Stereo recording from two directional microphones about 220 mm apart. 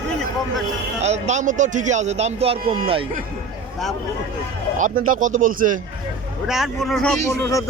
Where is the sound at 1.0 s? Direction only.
30° right (ahead or behind).